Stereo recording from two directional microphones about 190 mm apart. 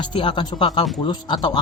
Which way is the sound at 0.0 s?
25° left (ahead or behind).